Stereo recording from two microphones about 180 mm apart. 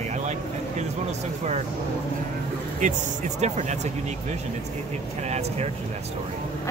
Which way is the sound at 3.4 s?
40° right (ahead or behind).